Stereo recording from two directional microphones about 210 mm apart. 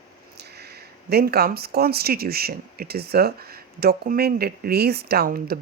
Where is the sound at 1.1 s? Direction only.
50° right (ahead or behind).